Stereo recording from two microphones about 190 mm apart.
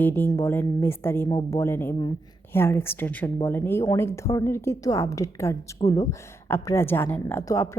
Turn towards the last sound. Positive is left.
turn(degrees=15)  # may be behind; listen again after turning